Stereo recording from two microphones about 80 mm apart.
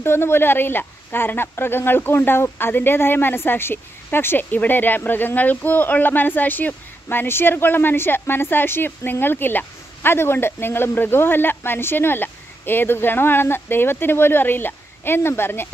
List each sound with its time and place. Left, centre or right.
0.0 s speech: left